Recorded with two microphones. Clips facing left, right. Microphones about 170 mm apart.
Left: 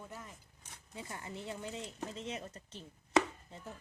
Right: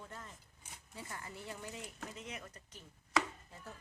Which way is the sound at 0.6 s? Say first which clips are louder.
Even; 10° right (ahead or behind).